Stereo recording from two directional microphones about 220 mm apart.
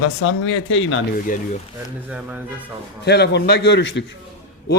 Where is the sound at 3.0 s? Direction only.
50° left (ahead or behind).